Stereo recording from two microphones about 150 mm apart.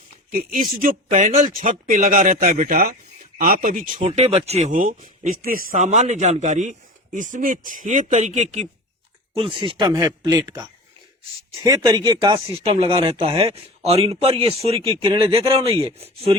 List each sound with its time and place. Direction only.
0.3 s speech: 65° right (ahead or behind); by 8.6 s 50° right (ahead or behind)
9.3 s speech: 35° right (ahead or behind)